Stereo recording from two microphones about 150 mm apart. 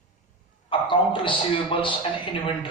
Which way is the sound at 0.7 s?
35° left (ahead or behind).